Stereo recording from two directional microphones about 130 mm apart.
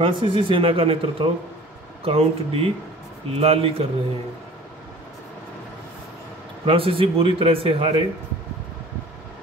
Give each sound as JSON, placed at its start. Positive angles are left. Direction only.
{"t": 0.0, "sound": "speech", "side_deg": -40}
{"t": 6.6, "sound": "speech", "side_deg": -45}